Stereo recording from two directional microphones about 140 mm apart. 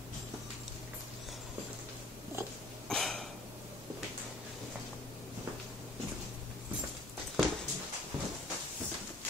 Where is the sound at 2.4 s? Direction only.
20° right (ahead or behind).